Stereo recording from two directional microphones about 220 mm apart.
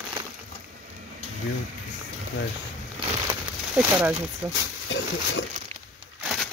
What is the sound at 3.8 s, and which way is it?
Speech, 10° right (ahead or behind).